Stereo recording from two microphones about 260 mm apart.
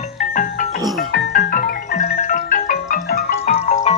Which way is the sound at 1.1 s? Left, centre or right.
Left.